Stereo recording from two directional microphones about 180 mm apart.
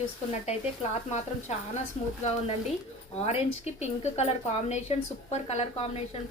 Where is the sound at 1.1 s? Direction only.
40° left (ahead or behind).